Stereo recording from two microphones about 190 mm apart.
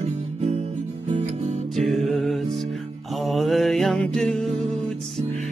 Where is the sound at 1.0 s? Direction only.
35° right (ahead or behind).